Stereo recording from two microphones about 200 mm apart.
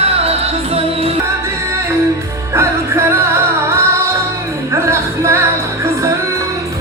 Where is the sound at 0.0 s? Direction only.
30° right (ahead or behind).